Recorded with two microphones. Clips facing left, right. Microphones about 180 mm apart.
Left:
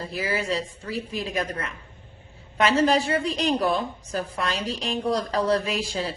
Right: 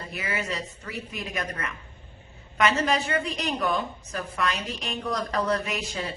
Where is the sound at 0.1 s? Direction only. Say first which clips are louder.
Left 4 dB; 30° left (ahead or behind).